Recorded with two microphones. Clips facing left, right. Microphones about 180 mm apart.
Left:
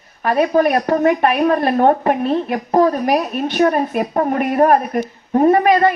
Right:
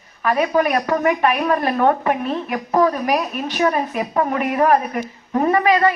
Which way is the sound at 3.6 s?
50° left (ahead or behind).